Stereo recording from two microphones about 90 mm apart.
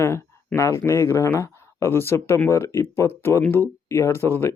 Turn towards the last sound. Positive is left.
turn(degrees=25)  # may be behind; listen again after turning